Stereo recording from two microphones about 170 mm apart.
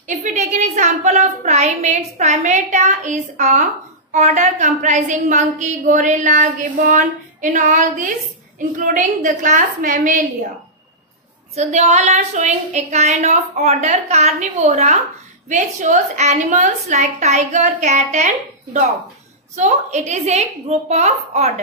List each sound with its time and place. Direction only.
0.0 s a woman's voice: 45° right (ahead or behind)
11.5 s a woman's voice: 40° right (ahead or behind)